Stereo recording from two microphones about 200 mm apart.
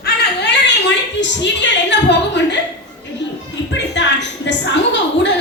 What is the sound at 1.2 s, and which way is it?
A woman's voice, 60° left (ahead or behind).